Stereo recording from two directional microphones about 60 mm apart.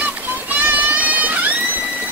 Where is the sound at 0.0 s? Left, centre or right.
Right.